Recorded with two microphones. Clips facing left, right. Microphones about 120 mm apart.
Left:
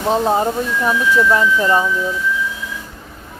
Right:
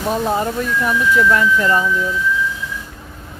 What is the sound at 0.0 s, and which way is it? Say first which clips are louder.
Speech: left 3 dB; 25° left (ahead or behind).